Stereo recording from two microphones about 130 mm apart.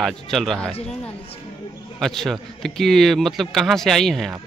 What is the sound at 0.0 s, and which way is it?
Speech, centre (ahead or behind).